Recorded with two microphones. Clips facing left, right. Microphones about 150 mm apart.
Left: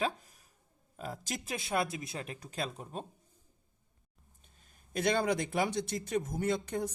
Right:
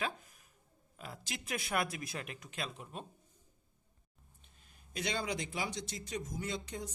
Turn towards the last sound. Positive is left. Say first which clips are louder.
# left 8 dB
turn(degrees=55)  # may be behind; listen again after turning